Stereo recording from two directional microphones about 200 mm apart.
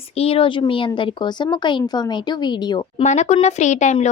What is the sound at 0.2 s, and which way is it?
Speech, 30° left (ahead or behind).